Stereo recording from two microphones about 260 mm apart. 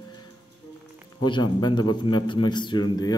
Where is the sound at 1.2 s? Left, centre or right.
Centre.